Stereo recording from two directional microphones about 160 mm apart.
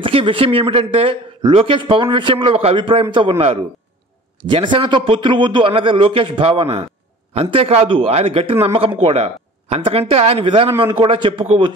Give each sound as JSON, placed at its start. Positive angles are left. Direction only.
{"t": 0.0, "sound": "a man's voice", "side_deg": -35}